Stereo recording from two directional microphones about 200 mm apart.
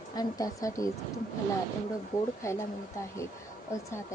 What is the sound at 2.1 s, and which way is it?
Speech, 15° left (ahead or behind).